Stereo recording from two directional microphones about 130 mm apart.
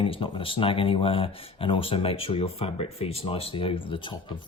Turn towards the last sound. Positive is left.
turn(degrees=40)  # may be behind; listen again after turning